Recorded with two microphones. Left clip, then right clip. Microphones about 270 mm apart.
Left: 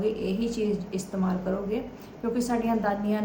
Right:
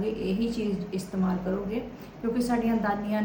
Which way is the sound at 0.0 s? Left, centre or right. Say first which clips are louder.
Left 2 dB; centre.